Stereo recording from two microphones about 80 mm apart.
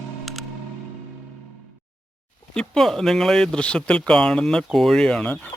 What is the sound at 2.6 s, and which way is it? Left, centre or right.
Speech, centre.